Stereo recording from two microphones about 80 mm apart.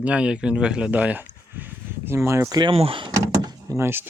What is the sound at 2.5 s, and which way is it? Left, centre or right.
Speech, right.